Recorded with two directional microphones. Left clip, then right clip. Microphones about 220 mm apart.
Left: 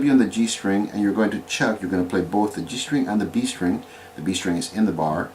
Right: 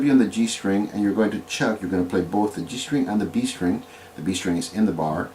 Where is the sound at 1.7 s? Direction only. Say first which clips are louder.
Even; 20° left (ahead or behind).